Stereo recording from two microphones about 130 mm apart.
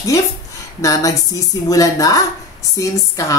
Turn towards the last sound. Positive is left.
turn(degrees=25)  # may be behind; listen again after turning